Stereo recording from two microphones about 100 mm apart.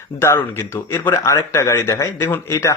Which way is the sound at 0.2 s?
25° left (ahead or behind).